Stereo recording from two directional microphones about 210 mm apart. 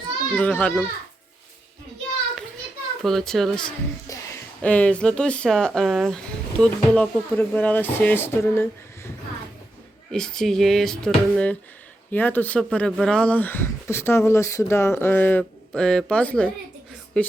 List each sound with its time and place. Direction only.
0.3 s speech: 5° left (ahead or behind)
3.0 s speech: centre (ahead or behind)
4.1 s a sound: 15° left (ahead or behind)
4.6 s speech: 5° left (ahead or behind)
10.1 s speech: 5° left (ahead or behind)